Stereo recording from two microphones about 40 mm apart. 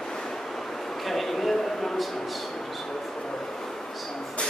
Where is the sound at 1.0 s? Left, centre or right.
Centre.